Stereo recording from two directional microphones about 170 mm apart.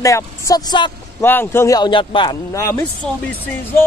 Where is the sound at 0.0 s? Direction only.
20° left (ahead or behind).